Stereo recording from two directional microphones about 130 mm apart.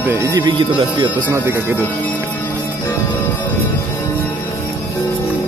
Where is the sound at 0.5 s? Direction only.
40° right (ahead or behind).